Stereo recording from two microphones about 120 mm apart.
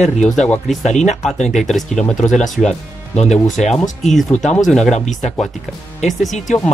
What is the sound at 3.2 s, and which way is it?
Speech, 70° left (ahead or behind).